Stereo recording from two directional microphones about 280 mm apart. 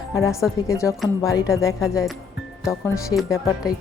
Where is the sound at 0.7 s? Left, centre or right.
Centre.